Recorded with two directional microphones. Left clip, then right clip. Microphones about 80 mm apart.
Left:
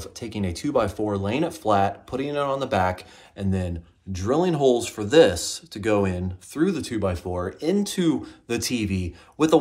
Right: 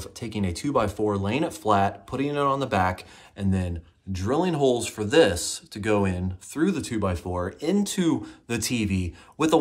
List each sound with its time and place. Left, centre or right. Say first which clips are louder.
0.0 s speech: left 1 dB; right
8.5 s speech: left 1 dB; right